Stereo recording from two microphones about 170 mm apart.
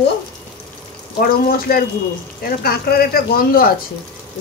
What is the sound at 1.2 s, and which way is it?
Speech, 60° left (ahead or behind).